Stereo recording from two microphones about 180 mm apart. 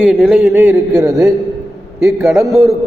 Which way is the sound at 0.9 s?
20° right (ahead or behind).